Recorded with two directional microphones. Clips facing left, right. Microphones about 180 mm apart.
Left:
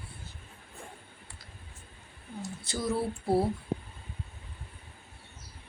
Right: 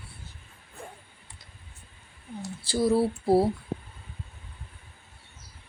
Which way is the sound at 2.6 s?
30° right (ahead or behind).